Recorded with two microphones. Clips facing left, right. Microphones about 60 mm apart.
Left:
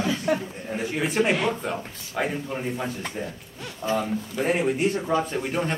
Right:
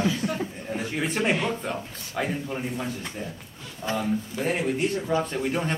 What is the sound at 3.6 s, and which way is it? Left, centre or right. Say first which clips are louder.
Speech: left 3 dB; left.